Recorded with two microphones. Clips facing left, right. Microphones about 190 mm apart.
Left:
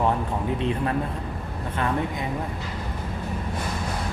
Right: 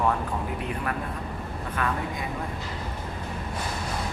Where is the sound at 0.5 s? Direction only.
25° left (ahead or behind).